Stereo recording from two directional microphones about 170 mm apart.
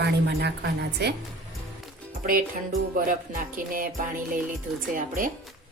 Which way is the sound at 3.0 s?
55° right (ahead or behind).